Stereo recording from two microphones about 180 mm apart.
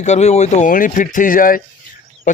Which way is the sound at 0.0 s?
40° left (ahead or behind).